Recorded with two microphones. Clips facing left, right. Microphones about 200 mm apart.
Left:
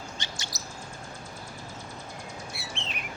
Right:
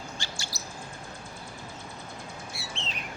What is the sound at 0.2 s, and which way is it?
Chirp, 20° left (ahead or behind).